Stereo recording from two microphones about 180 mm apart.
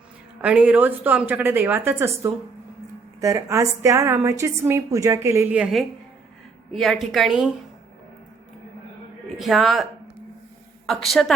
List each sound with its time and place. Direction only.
0.4 s a woman's voice: 5° right (ahead or behind)
9.4 s a woman's voice: centre (ahead or behind)
10.8 s a woman's voice: centre (ahead or behind)